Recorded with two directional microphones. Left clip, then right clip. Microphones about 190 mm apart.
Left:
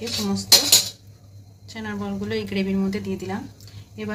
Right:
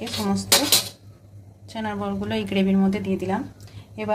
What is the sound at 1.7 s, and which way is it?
A woman's voice, 55° right (ahead or behind).